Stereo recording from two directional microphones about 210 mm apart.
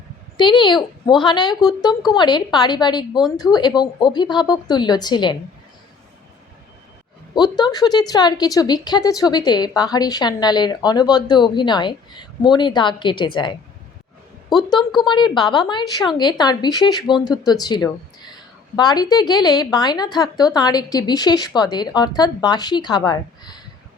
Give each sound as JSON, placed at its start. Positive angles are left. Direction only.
{"t": 0.3, "sound": "a woman's voice", "side_deg": 20}
{"t": 7.3, "sound": "a woman's voice", "side_deg": 20}